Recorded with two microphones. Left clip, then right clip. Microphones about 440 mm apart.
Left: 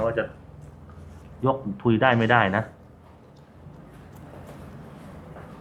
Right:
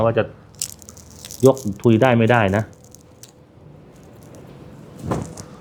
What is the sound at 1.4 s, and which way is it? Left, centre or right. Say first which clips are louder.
Speech: right 9 dB; centre.